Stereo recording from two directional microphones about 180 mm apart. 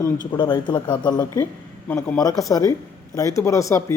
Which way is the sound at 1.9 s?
10° left (ahead or behind).